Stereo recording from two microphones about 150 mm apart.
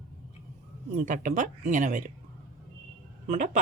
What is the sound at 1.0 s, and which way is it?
Speech, 60° right (ahead or behind).